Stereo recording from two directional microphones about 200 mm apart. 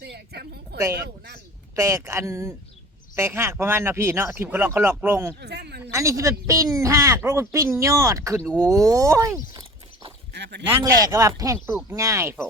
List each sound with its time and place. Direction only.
0.0 s a woman's voice: 55° right (ahead or behind)
1.7 s speech: 15° right (ahead or behind)
5.4 s speech: 55° right (ahead or behind)
5.8 s speech: 15° right (ahead or behind)
10.3 s a sound: 60° right (ahead or behind)
11.0 s speech: 15° right (ahead or behind)